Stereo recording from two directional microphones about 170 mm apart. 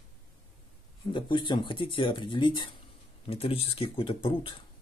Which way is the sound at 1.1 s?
30° left (ahead or behind).